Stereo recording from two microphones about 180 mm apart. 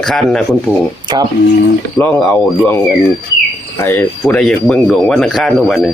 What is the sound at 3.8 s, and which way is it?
Speech, 10° left (ahead or behind).